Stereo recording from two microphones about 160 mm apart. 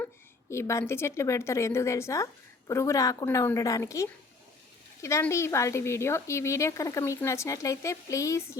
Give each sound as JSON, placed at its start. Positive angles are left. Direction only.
{"t": 0.5, "sound": "a woman's voice", "side_deg": 15}